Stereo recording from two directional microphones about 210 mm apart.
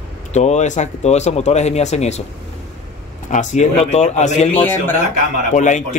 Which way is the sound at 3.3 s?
35° left (ahead or behind).